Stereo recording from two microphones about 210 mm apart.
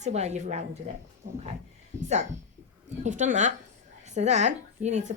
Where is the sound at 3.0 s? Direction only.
35° right (ahead or behind).